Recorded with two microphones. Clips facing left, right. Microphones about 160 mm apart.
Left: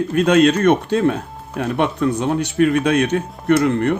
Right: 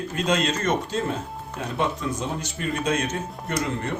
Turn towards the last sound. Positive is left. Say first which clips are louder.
# left 12 dB
turn(degrees=65)  # may be behind; listen again after turning